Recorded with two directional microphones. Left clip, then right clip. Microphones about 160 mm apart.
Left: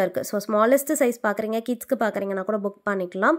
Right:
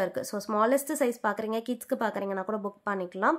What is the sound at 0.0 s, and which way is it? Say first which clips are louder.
Speech: left 6 dB; 30° left (ahead or behind).